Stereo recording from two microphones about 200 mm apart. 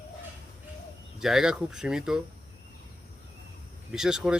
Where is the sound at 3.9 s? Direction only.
5° right (ahead or behind).